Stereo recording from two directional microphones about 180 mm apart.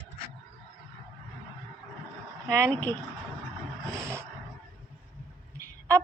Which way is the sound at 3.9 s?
15° right (ahead or behind).